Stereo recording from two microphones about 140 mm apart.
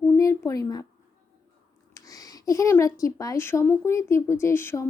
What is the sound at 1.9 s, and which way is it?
Speech, 25° left (ahead or behind).